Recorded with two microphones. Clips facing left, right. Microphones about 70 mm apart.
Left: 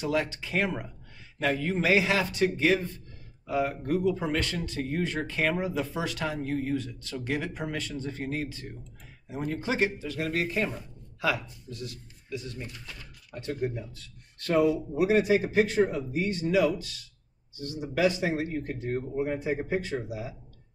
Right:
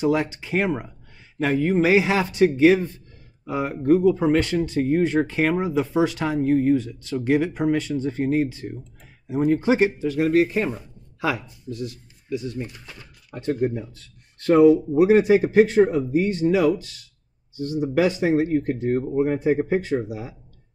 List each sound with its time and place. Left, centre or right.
0.0 s speech: centre
13.3 s speech: right